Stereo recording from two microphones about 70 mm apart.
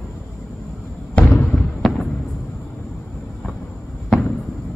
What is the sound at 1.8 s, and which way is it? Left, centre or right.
Fireworks, centre.